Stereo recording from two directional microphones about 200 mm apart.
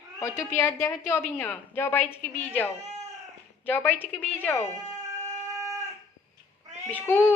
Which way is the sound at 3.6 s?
10° left (ahead or behind).